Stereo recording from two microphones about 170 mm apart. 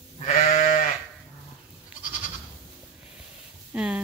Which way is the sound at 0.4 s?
50° left (ahead or behind).